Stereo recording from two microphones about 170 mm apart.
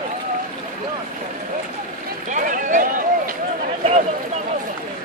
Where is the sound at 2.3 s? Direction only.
50° right (ahead or behind).